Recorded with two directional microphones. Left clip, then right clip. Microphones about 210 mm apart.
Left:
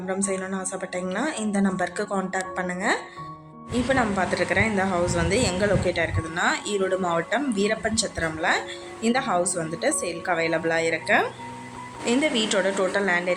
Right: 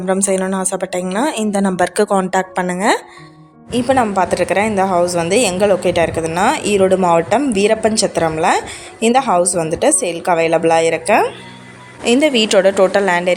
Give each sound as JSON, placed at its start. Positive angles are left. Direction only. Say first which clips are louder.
{"t": 0.1, "sound": "a woman's voice", "louder": "right 12 dB", "side_deg": -45}